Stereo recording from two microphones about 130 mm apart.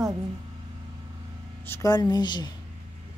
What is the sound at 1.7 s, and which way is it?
Speech, 30° left (ahead or behind).